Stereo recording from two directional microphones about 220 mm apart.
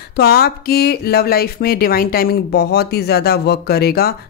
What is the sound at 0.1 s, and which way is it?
Speech, 45° left (ahead or behind).